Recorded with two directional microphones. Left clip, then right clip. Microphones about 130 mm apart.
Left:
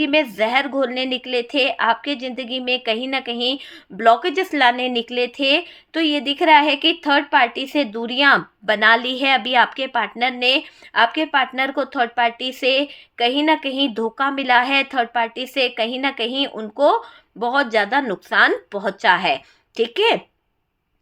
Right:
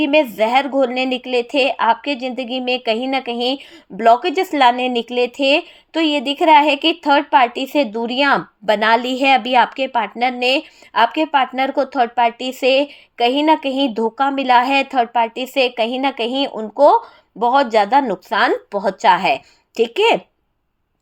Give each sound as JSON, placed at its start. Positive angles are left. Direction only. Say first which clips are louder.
{"t": 0.0, "sound": "speech", "louder": "right 3 dB", "side_deg": -25}